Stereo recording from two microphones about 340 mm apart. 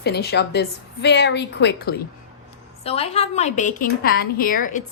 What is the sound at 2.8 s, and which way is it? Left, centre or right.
A woman's voice, centre.